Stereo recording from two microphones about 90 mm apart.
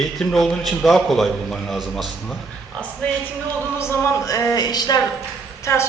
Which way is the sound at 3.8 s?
30° left (ahead or behind).